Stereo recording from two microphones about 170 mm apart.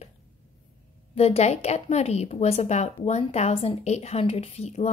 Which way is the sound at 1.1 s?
35° left (ahead or behind).